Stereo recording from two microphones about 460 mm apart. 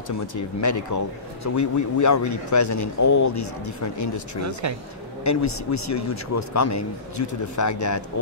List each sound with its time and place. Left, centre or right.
0.3 s speech: left